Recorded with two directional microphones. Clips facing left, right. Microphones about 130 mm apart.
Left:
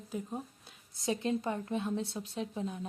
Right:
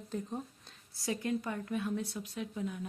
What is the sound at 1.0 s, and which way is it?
A woman's voice, 25° left (ahead or behind).